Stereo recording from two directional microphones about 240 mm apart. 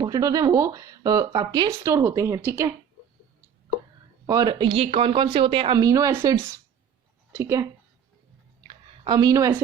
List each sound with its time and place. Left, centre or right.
0.0 s speech: centre
4.3 s speech: centre
8.6 s a sound: centre